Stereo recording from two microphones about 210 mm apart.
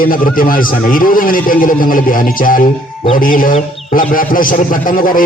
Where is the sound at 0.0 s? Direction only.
40° left (ahead or behind).